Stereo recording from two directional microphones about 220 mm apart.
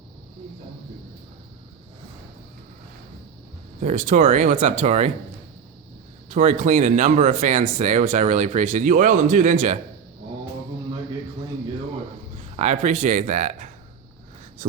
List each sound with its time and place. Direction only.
3.8 s speech: 35° right (ahead or behind)
6.3 s speech: 35° right (ahead or behind)
12.5 s speech: 30° right (ahead or behind)